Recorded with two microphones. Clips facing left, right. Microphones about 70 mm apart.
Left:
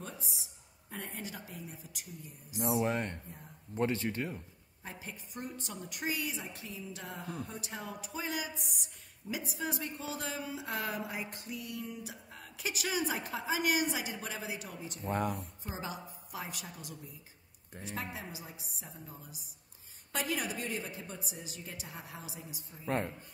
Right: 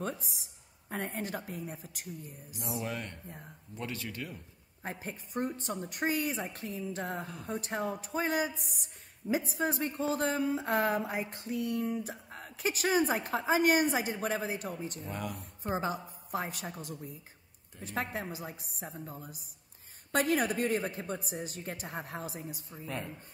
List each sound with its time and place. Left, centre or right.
0.8 s speech: right
2.8 s speech: left
5.0 s speech: right
15.0 s speech: left
15.6 s a woman's voice: right
17.8 s speech: right
22.8 s speech: left